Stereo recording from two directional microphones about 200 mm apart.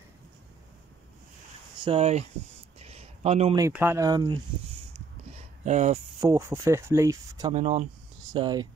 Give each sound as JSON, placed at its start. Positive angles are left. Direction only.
{"t": 1.9, "sound": "speech", "side_deg": -35}
{"t": 2.8, "sound": "a sound", "side_deg": -30}
{"t": 3.5, "sound": "speech", "side_deg": -15}
{"t": 5.6, "sound": "speech", "side_deg": -35}
{"t": 6.2, "sound": "speech", "side_deg": -15}
{"t": 7.5, "sound": "speech", "side_deg": -35}
{"t": 8.3, "sound": "speech", "side_deg": -20}